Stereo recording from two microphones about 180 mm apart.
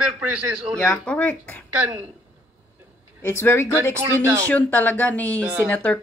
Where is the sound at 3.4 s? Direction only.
15° left (ahead or behind).